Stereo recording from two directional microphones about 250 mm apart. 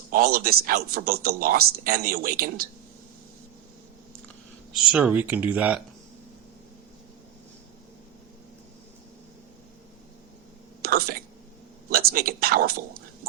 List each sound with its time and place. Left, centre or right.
0.1 s speech: right
4.7 s speech: centre
10.8 s a sound: right